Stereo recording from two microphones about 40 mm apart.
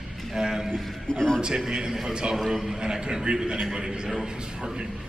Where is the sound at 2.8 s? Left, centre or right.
Centre.